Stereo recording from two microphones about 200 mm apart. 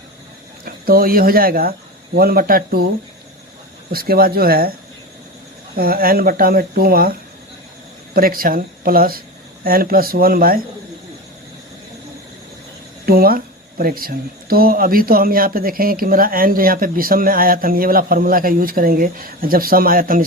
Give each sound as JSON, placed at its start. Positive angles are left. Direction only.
{"t": 0.6, "sound": "speech", "side_deg": -50}
{"t": 3.9, "sound": "speech", "side_deg": -50}
{"t": 5.7, "sound": "speech", "side_deg": -45}
{"t": 8.1, "sound": "speech", "side_deg": -45}
{"t": 13.1, "sound": "speech", "side_deg": -50}